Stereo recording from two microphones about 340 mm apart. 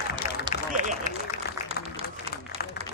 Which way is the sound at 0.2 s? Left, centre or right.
Centre.